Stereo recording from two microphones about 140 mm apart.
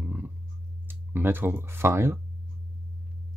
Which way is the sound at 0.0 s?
10° right (ahead or behind).